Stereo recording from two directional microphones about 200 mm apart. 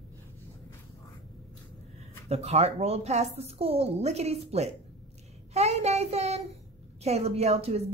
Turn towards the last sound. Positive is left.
turn(degrees=-30)  # may be behind; listen again after turning